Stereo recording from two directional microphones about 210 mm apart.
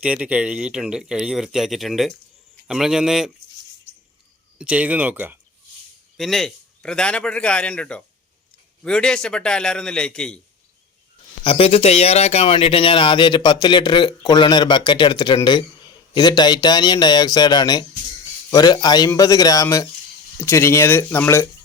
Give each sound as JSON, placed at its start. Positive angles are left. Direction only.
{"t": 0.0, "sound": "speech", "side_deg": -5}
{"t": 4.5, "sound": "speech", "side_deg": -5}
{"t": 11.4, "sound": "speech", "side_deg": 25}